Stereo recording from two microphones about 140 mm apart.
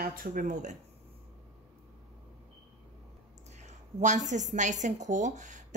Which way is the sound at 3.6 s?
60° right (ahead or behind).